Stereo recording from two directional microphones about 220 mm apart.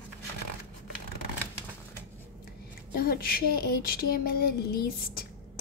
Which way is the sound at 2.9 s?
40° left (ahead or behind).